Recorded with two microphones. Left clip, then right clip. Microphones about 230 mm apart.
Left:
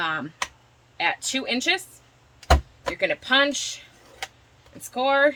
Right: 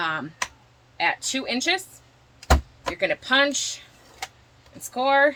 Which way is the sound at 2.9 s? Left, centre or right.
Left.